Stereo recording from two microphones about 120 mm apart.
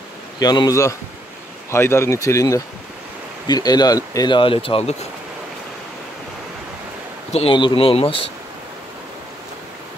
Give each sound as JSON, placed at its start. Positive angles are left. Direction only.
{"t": 0.4, "sound": "speech", "side_deg": 35}
{"t": 4.4, "sound": "speech", "side_deg": 50}
{"t": 7.3, "sound": "speech", "side_deg": 45}